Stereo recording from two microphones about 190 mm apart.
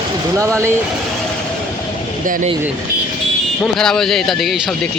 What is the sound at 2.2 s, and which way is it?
Speech, 45° right (ahead or behind).